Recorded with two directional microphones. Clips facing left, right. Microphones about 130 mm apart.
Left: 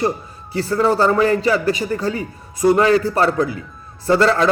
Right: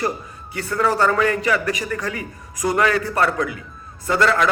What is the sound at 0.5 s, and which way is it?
A man's voice, 30° left (ahead or behind).